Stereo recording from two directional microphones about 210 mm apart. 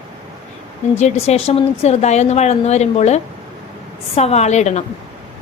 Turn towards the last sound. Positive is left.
turn(degrees=35)  # may be behind; listen again after turning